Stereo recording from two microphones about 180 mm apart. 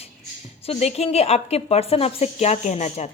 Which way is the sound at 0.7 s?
35° left (ahead or behind).